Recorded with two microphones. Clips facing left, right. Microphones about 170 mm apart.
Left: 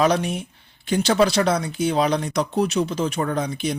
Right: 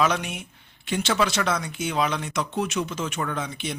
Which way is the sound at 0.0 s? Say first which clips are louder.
Left 5 dB; 35° left (ahead or behind).